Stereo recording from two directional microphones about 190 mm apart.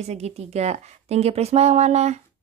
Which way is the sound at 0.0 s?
35° right (ahead or behind).